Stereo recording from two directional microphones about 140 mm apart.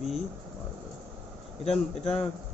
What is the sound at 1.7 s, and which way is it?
Speech, 50° left (ahead or behind).